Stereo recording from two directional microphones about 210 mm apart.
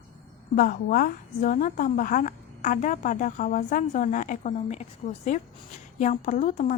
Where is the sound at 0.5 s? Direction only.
40° left (ahead or behind).